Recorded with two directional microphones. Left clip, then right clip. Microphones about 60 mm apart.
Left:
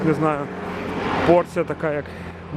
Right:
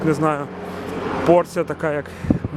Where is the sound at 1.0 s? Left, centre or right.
Left.